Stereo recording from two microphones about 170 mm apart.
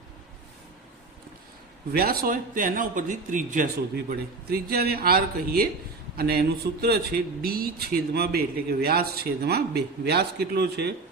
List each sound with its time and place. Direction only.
1.9 s a man's voice: 65° right (ahead or behind)
3.9 s a man's voice: 65° right (ahead or behind)